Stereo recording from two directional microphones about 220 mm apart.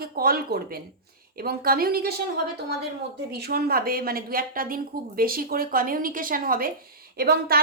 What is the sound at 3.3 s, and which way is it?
A woman's voice, 45° right (ahead or behind).